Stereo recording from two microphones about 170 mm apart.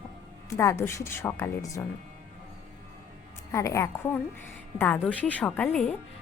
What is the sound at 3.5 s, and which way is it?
A woman's voice, 15° left (ahead or behind).